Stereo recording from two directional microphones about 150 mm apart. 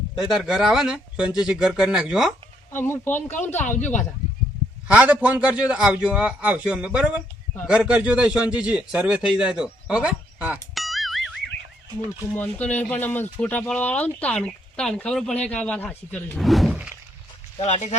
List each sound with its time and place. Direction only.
0.2 s speech: 5° right (ahead or behind)
2.7 s speech: 15° left (ahead or behind)
4.9 s a man's voice: 10° right (ahead or behind)
12.3 s speech: 10° left (ahead or behind)
16.4 s speech: centre (ahead or behind)
17.6 s speech: 50° left (ahead or behind)